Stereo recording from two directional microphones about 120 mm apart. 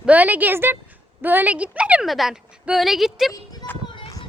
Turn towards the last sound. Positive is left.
turn(degrees=35)  # may be behind; listen again after turning